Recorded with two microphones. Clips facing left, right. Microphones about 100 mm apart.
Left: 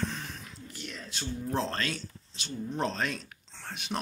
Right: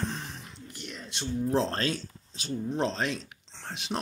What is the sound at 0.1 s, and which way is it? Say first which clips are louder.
Whispering: right 2 dB; 25° right (ahead or behind).